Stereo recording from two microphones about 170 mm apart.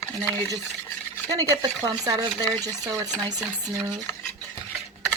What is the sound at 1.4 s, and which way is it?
Speech, 20° right (ahead or behind).